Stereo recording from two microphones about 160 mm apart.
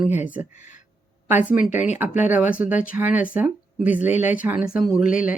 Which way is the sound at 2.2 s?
10° right (ahead or behind).